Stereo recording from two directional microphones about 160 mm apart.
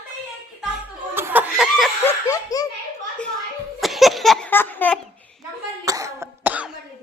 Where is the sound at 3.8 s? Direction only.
Centre (ahead or behind).